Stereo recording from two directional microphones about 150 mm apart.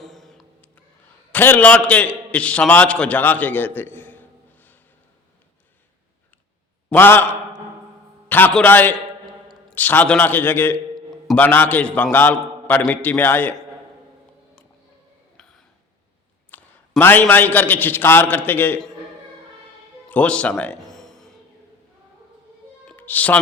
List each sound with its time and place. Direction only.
0.0 s a sound: centre (ahead or behind)
1.3 s a man's voice: 10° left (ahead or behind)
6.9 s a man's voice: 15° left (ahead or behind)
8.3 s a man's voice: 10° left (ahead or behind)
16.5 s a sound: 10° left (ahead or behind)
17.0 s a man's voice: 15° left (ahead or behind)
20.1 s music: 10° left (ahead or behind)
22.9 s music: 10° left (ahead or behind)